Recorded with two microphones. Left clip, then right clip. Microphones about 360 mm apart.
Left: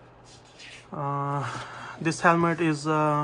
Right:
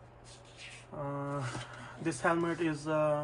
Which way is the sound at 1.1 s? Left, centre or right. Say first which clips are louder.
Left 9 dB; left.